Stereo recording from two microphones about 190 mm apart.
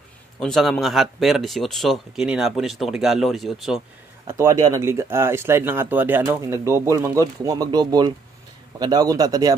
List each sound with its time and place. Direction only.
0.4 s speech: centre (ahead or behind)
4.3 s a man's voice: 15° right (ahead or behind)